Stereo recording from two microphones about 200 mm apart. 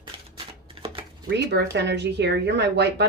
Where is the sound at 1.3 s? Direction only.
60° right (ahead or behind).